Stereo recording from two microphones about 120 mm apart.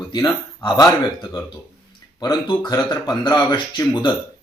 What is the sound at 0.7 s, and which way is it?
Speech, 30° left (ahead or behind).